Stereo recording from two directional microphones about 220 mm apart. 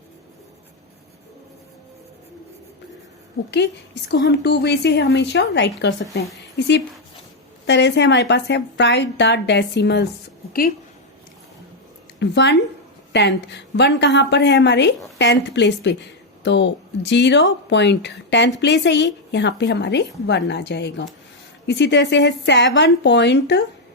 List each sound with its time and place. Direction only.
3.5 s a woman's voice: 50° left (ahead or behind)
12.2 s a woman's voice: 55° left (ahead or behind)